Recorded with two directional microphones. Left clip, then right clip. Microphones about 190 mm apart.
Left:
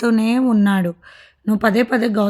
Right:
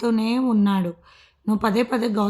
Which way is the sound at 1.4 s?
25° left (ahead or behind).